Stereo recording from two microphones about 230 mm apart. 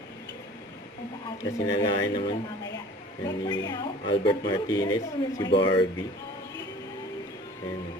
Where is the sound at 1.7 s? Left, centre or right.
Left.